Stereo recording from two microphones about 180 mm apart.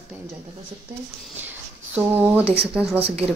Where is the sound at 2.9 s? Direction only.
35° right (ahead or behind).